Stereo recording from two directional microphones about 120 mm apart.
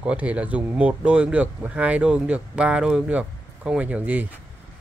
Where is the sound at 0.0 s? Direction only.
10° right (ahead or behind).